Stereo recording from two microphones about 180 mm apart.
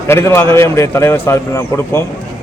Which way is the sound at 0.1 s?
15° left (ahead or behind).